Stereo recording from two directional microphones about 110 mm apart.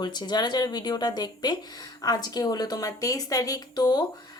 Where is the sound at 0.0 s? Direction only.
40° left (ahead or behind).